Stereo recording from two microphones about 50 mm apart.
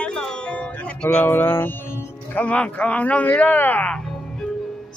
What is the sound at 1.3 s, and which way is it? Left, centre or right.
Music, left.